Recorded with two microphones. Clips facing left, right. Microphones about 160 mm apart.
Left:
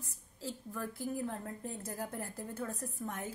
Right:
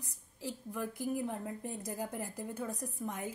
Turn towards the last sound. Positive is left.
turn(degrees=-15)  # may be behind; listen again after turning